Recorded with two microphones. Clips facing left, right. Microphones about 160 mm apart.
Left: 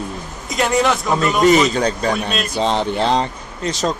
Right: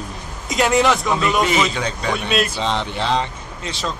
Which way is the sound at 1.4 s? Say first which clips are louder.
Left 7 dB; 40° left (ahead or behind).